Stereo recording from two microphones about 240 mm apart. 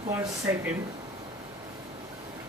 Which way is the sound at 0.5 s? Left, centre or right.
Centre.